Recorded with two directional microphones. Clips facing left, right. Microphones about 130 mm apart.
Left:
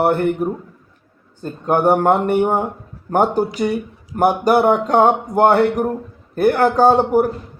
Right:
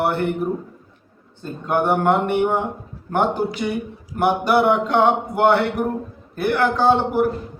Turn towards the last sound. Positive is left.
turn(degrees=45)  # may be behind; listen again after turning